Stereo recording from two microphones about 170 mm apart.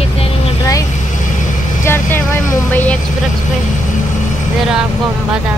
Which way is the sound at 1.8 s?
15° left (ahead or behind).